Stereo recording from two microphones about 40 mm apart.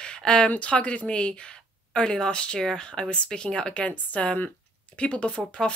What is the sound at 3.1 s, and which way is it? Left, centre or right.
Speech, left.